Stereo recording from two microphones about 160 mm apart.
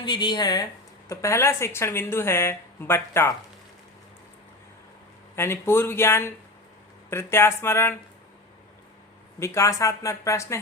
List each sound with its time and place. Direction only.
0.0 s speech: 30° left (ahead or behind)
5.4 s speech: 15° left (ahead or behind)
9.4 s speech: 20° left (ahead or behind)